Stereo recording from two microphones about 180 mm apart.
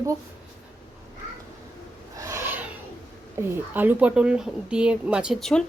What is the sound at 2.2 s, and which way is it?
Owl, 15° right (ahead or behind).